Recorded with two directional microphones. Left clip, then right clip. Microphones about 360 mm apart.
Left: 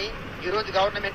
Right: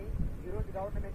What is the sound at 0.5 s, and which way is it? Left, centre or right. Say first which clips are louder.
Speech: left 16 dB; left.